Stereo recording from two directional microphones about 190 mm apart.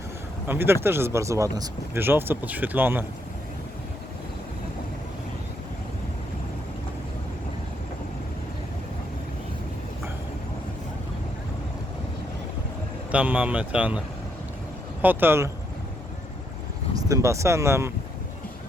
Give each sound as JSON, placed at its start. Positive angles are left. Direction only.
{"t": 0.4, "sound": "speech", "side_deg": -10}
{"t": 13.1, "sound": "speech", "side_deg": -5}
{"t": 15.0, "sound": "speech", "side_deg": -10}
{"t": 17.1, "sound": "speech", "side_deg": -15}